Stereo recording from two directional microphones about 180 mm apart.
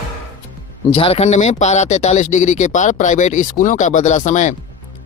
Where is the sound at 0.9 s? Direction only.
35° left (ahead or behind).